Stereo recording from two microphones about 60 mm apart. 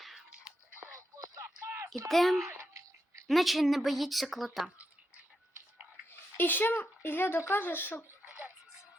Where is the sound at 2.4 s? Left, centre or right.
Right.